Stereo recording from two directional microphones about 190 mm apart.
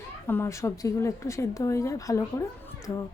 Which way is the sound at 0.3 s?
15° left (ahead or behind).